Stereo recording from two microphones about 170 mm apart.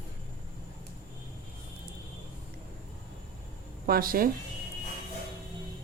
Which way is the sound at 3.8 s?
60° right (ahead or behind).